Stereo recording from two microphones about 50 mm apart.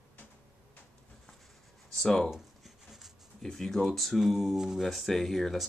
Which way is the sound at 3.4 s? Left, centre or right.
Centre.